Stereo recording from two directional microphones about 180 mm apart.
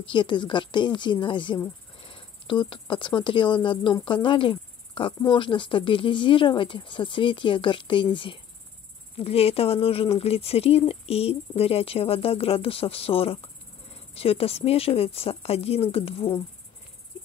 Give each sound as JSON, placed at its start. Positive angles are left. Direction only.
{"t": 0.0, "sound": "speech", "side_deg": 25}